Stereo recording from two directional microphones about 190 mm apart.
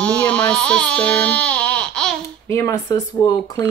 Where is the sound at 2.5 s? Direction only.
15° left (ahead or behind).